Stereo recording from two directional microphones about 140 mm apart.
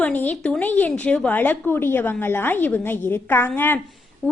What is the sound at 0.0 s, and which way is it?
A woman's voice, 10° left (ahead or behind).